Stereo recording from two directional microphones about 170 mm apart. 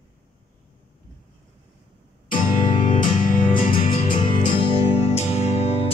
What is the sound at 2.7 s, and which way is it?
Music, 45° left (ahead or behind).